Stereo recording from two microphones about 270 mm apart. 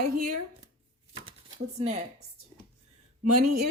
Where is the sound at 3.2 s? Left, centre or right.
Right.